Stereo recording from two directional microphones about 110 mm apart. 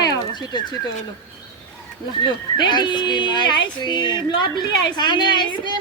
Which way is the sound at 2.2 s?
45° left (ahead or behind).